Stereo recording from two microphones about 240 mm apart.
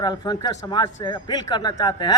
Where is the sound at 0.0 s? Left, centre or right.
Centre.